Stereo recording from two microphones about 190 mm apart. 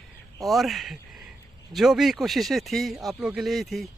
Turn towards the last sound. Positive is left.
turn(degrees=0)  # may be behind; listen again after turning